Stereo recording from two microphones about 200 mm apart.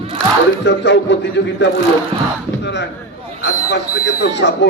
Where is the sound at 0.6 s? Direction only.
60° left (ahead or behind).